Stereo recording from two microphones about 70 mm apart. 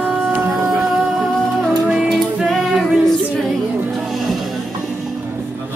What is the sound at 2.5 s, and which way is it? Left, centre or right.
Music, centre.